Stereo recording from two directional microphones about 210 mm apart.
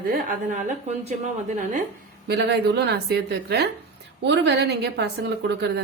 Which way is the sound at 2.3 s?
50° right (ahead or behind).